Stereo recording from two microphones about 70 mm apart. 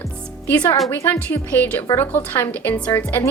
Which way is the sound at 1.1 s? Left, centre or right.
Left.